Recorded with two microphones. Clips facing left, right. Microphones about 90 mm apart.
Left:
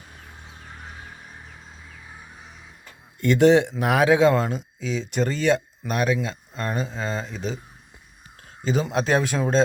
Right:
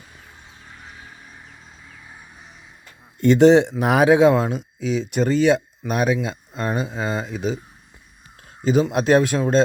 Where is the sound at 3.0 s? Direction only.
25° right (ahead or behind); by 7.5 s 10° right (ahead or behind).